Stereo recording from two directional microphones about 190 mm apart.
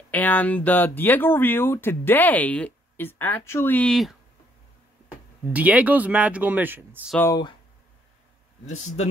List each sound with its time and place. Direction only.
0.1 s speech: 10° left (ahead or behind)
5.5 s speech: 10° right (ahead or behind)
7.2 s speech: 20° left (ahead or behind)